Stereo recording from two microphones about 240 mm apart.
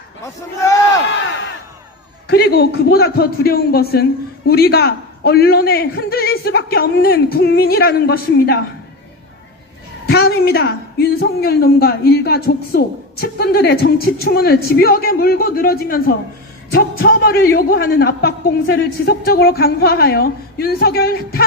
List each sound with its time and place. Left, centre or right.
2.2 s a woman's voice: left
10.1 s a woman's voice: left